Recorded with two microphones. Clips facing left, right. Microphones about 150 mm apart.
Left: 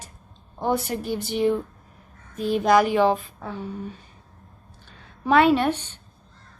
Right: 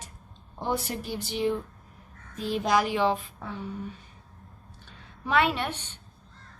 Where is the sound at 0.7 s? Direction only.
55° left (ahead or behind).